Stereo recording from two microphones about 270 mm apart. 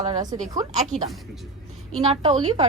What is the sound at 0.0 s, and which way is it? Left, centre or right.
Speech, centre.